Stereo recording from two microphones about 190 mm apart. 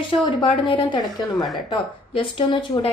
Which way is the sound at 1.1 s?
Centre (ahead or behind).